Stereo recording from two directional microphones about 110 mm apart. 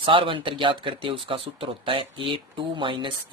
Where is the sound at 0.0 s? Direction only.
50° right (ahead or behind).